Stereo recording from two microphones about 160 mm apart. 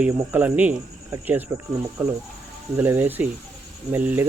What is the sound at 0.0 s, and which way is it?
Speech, 10° right (ahead or behind).